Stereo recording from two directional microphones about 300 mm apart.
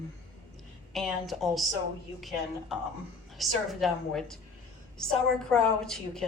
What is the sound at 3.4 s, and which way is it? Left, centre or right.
A woman's voice, centre.